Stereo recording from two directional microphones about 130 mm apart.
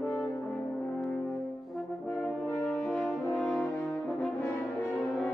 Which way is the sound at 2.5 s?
15° left (ahead or behind).